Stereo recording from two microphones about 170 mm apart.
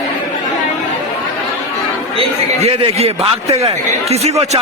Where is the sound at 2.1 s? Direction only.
35° right (ahead or behind).